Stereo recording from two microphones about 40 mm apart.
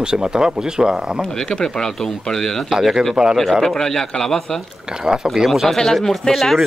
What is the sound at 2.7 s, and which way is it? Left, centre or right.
Speech, centre.